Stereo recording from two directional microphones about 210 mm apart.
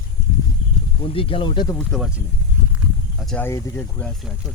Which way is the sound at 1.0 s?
25° left (ahead or behind).